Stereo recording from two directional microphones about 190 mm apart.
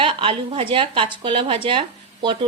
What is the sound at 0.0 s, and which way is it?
A woman's voice, 25° right (ahead or behind).